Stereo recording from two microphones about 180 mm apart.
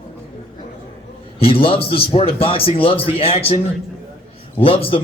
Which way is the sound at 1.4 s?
30° left (ahead or behind).